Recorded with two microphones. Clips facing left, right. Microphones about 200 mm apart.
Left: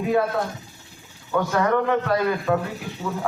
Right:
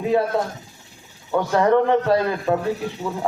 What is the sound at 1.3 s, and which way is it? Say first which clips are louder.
A man's voice: right 4 dB; 30° right (ahead or behind).